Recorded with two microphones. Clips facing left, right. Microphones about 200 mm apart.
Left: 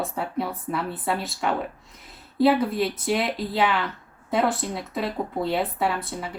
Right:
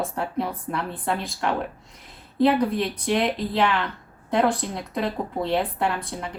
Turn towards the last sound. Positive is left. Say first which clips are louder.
# even
turn(degrees=0)  # may be behind; listen again after turning